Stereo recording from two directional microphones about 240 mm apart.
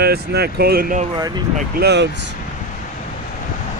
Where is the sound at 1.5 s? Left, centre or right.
Right.